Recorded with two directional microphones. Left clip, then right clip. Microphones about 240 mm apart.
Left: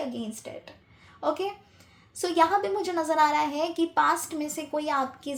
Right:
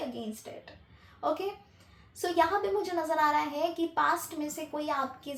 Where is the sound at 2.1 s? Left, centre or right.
Left.